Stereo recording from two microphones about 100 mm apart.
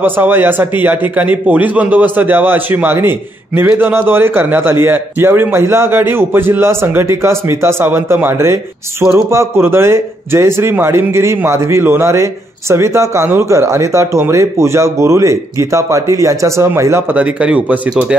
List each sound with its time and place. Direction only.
0.0 s a man's voice: 20° right (ahead or behind)
17.2 s speech: 15° right (ahead or behind)